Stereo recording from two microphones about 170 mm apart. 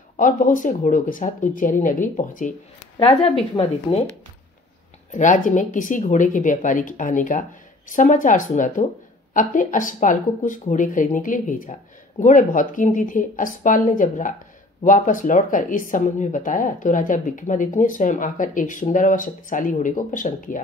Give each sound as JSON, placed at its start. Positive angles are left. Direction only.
{"t": 0.2, "sound": "speech", "side_deg": 50}
{"t": 3.0, "sound": "speech", "side_deg": 35}
{"t": 5.1, "sound": "speech", "side_deg": 50}